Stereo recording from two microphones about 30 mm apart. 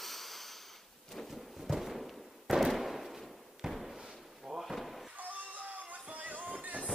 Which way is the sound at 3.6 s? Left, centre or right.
Right.